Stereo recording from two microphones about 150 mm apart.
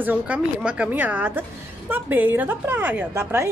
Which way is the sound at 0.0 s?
10° right (ahead or behind).